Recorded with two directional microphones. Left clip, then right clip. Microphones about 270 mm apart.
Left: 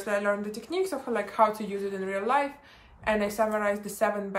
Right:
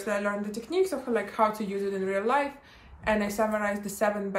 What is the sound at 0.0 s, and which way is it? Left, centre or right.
Speech, centre.